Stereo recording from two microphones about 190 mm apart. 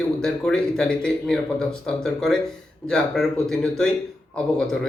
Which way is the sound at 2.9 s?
Centre (ahead or behind).